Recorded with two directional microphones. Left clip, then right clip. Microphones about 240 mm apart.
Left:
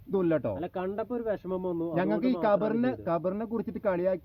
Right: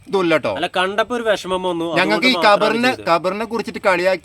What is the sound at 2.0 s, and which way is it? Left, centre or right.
Speech, centre.